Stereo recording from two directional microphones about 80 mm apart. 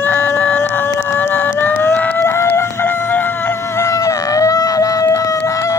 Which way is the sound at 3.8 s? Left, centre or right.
Left.